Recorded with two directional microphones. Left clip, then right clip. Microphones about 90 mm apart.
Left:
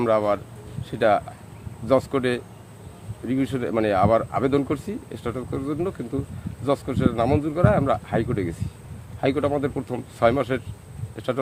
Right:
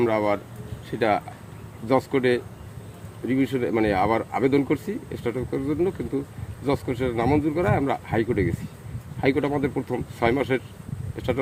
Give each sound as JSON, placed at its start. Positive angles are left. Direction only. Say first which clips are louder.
{"t": 0.0, "sound": "speech", "louder": "left 2 dB", "side_deg": 30}